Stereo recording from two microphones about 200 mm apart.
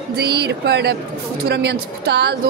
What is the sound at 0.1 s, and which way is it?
A woman's voice, 55° right (ahead or behind).